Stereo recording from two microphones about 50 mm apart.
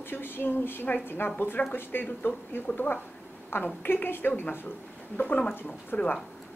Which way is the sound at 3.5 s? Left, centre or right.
Left.